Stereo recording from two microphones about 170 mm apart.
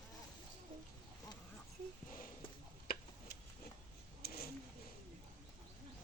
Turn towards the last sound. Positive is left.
turn(degrees=65)  # may be behind; listen again after turning